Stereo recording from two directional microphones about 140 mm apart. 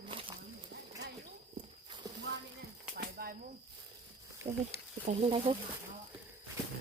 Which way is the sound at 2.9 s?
90° right.